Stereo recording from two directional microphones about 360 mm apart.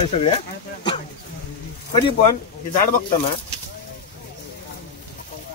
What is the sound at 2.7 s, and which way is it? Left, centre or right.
Speech, left.